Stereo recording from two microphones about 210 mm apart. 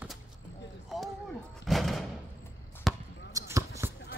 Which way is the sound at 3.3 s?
15° right (ahead or behind).